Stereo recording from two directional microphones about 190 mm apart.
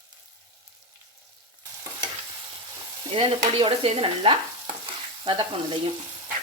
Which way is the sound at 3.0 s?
25° right (ahead or behind).